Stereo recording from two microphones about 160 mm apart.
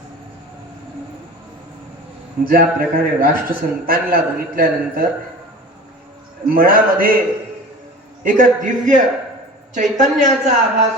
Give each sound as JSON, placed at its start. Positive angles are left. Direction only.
{"t": 2.4, "sound": "a man's voice", "side_deg": -65}
{"t": 6.5, "sound": "a man's voice", "side_deg": -65}
{"t": 8.2, "sound": "a man's voice", "side_deg": -55}